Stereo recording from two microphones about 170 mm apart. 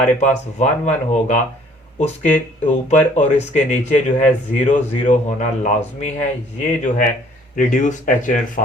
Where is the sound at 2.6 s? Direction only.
45° left (ahead or behind).